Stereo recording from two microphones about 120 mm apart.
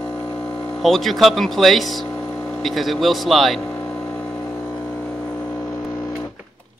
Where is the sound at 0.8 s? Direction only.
Centre (ahead or behind).